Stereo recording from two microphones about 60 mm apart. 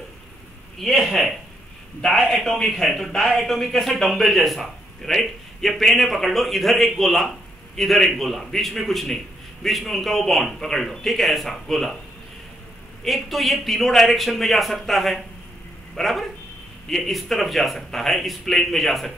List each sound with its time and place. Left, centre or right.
0.7 s a man's voice: centre
2.3 s a man's voice: centre
13.0 s a man's voice: centre